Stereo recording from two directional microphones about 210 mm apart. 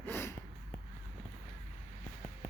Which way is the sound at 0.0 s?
10° left (ahead or behind).